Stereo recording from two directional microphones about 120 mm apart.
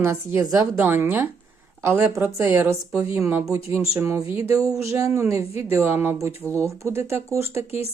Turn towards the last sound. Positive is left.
turn(degrees=-25)  # may be behind; listen again after turning